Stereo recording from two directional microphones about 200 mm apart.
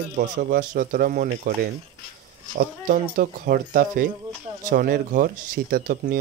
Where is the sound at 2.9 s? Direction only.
45° right (ahead or behind).